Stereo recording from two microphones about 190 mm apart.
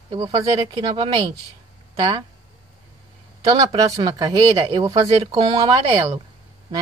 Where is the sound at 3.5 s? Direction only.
20° right (ahead or behind).